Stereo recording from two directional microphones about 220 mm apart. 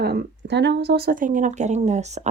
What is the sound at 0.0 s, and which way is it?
A woman's voice, 45° right (ahead or behind).